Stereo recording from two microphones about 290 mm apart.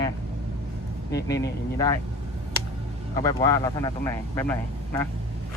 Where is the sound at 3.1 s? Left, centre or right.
Centre.